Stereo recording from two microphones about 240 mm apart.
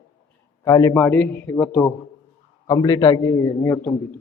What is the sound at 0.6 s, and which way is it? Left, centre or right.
A man's voice, centre.